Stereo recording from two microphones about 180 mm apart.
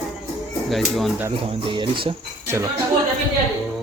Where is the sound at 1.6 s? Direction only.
25° right (ahead or behind).